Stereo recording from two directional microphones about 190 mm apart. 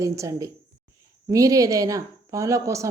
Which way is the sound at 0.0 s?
15° right (ahead or behind).